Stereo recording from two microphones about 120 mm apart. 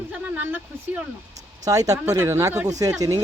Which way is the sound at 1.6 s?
30° right (ahead or behind).